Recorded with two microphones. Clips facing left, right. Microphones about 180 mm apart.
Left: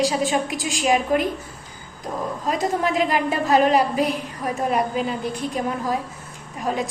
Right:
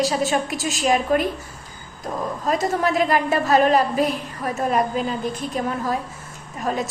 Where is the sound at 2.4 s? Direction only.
15° left (ahead or behind).